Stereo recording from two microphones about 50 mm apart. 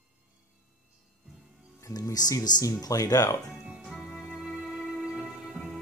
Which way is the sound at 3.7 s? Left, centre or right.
Centre.